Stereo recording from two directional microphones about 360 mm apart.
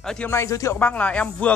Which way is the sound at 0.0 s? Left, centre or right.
Centre.